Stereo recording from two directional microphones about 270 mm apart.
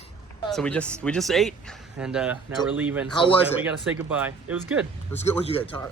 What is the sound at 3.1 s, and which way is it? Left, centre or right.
Speech, centre.